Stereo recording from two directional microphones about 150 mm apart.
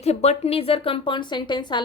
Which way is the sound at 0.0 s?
45° left (ahead or behind).